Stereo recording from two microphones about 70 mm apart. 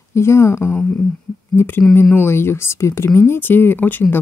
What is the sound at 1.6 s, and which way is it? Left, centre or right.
Speech, left.